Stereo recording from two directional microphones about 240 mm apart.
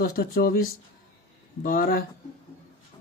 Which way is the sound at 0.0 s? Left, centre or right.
Left.